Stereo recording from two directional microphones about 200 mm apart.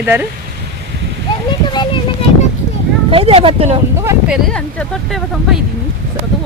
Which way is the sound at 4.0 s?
10° right (ahead or behind).